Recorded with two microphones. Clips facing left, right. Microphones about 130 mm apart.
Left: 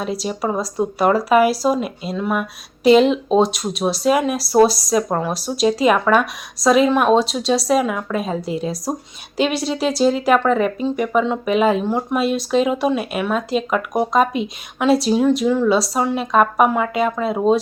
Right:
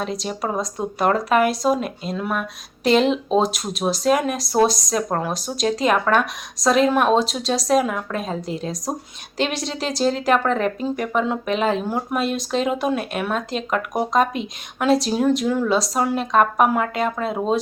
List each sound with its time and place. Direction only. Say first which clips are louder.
0.0 s speech: left 3 dB; 5° left (ahead or behind)